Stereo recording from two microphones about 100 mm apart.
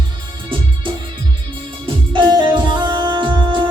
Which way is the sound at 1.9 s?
55° right (ahead or behind).